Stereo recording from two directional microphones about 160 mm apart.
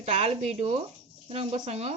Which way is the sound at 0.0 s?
45° right (ahead or behind).